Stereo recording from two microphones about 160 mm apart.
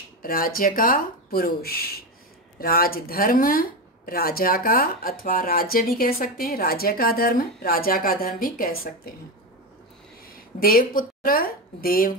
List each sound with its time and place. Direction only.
0.2 s speech: 65° left (ahead or behind)
10.6 s speech: 65° left (ahead or behind)